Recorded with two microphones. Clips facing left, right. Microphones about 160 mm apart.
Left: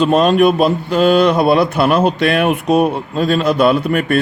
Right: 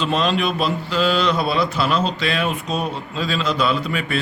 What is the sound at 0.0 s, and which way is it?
A man's voice, 50° left (ahead or behind).